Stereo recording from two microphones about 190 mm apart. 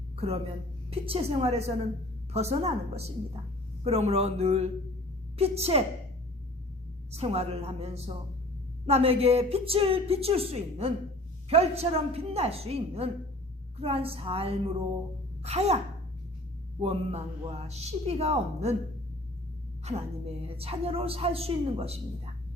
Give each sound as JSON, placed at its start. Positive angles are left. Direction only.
{"t": 0.2, "sound": "a woman's voice", "side_deg": -30}
{"t": 7.1, "sound": "a woman's voice", "side_deg": -35}
{"t": 16.8, "sound": "a woman's voice", "side_deg": -35}
{"t": 19.8, "sound": "a woman's voice", "side_deg": -35}